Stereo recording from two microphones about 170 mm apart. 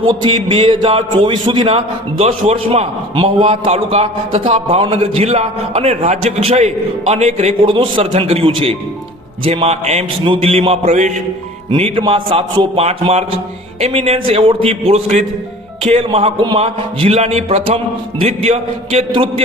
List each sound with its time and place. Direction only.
0.1 s a man's voice: 30° right (ahead or behind)
11.7 s a man's voice: 30° right (ahead or behind)